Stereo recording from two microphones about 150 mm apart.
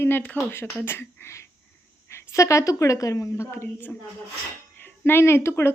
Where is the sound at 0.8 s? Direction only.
15° left (ahead or behind).